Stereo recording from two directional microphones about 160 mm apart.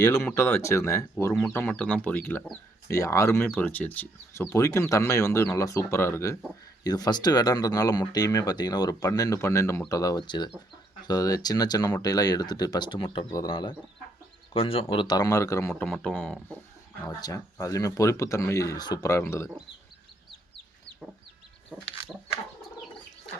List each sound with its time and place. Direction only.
0.0 s speech: 20° left (ahead or behind)
1.3 s a man's voice: 5° left (ahead or behind)
15.7 s a man's voice: 5° left (ahead or behind)
17.1 s speech: 25° left (ahead or behind)